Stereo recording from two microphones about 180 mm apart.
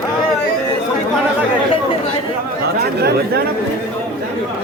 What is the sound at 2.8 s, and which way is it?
Speech, 60° right (ahead or behind).